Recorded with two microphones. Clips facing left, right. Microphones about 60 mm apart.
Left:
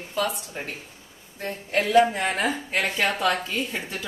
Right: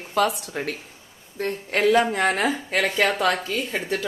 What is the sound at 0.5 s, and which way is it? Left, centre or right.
Speech, right.